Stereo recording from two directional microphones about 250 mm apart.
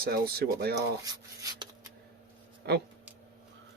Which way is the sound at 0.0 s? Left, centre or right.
Right.